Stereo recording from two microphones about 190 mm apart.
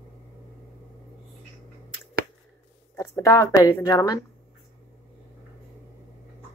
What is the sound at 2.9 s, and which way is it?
Speech, 15° left (ahead or behind).